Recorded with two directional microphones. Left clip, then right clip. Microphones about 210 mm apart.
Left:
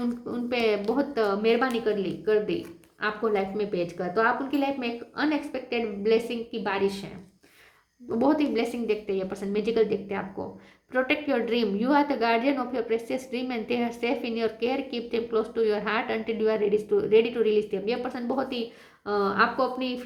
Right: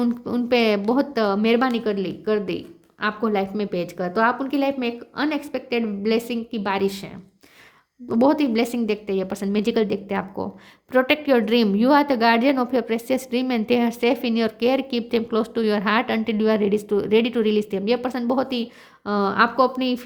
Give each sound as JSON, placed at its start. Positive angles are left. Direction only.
{"t": 0.0, "sound": "a woman's voice", "side_deg": -50}
{"t": 8.1, "sound": "a woman's voice", "side_deg": -50}